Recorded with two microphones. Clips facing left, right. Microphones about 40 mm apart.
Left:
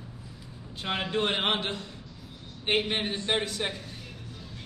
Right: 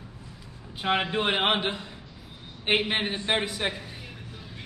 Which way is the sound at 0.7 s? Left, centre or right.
Centre.